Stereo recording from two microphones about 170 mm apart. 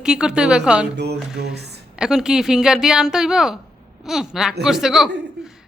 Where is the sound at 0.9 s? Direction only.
75° right (ahead or behind).